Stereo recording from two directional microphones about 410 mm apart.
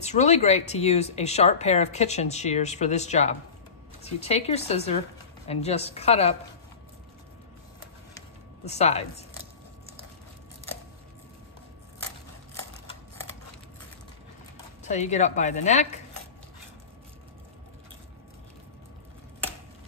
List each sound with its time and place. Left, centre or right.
0.0 s speech: centre
8.6 s speech: centre
14.8 s speech: centre